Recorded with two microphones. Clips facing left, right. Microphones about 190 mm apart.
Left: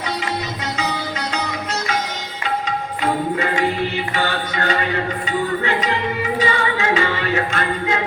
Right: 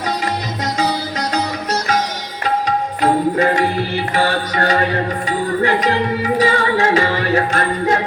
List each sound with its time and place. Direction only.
0.8 s music: 40° right (ahead or behind)
4.1 s music: 40° right (ahead or behind)
6.4 s music: 40° right (ahead or behind)